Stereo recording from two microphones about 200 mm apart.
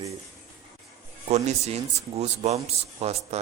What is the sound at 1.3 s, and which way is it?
Speech, 35° right (ahead or behind).